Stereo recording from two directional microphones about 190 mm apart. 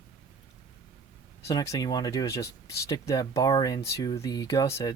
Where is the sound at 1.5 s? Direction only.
20° left (ahead or behind).